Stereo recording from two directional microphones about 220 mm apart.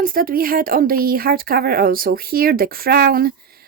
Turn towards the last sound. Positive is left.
turn(degrees=-40)  # may be behind; listen again after turning